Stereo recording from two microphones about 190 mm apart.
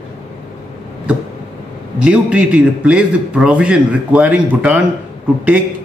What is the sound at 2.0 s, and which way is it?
Speech, 5° right (ahead or behind).